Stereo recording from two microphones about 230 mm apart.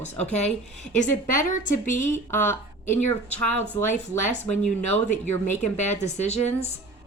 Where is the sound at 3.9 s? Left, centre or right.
Left.